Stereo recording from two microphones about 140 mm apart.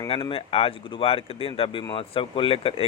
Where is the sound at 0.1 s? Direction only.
40° left (ahead or behind).